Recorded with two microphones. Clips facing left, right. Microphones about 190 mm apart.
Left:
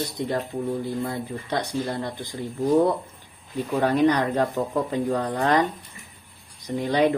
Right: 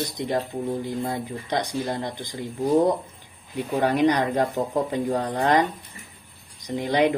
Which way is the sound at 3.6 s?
10° right (ahead or behind).